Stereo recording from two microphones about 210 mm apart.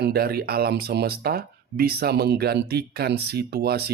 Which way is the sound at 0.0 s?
50° right (ahead or behind).